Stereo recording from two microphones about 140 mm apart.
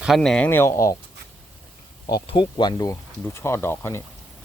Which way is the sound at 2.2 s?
35° left (ahead or behind).